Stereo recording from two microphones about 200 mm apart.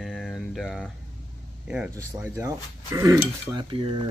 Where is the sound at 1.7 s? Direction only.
5° right (ahead or behind); by 3.9 s 25° right (ahead or behind).